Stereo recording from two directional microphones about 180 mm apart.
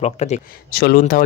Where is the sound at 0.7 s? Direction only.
60° left (ahead or behind).